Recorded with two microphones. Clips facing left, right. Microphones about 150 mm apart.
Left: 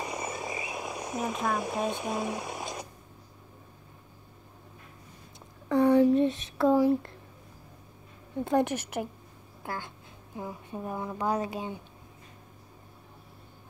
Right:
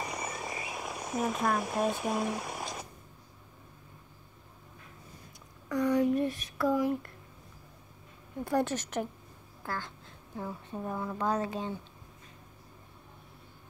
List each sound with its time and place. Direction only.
0.0 s frog: centre (ahead or behind)
6.0 s a sound: 25° left (ahead or behind)
8.5 s a woman's voice: 20° left (ahead or behind)
8.7 s a woman's voice: 10° left (ahead or behind)